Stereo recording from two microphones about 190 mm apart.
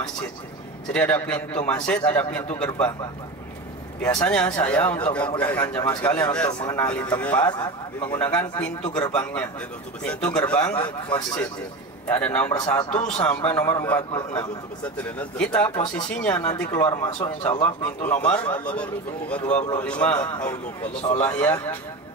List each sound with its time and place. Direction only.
0.9 s a man's voice: 5° left (ahead or behind)
4.0 s a man's voice: 5° left (ahead or behind)
6.4 s speech: 20° left (ahead or behind)
6.8 s a man's voice: 5° left (ahead or behind)
12.1 s a man's voice: 5° left (ahead or behind)
14.1 s speech: 20° left (ahead or behind)
14.8 s a man's voice: 5° left (ahead or behind)
21.2 s a man's voice: 10° left (ahead or behind)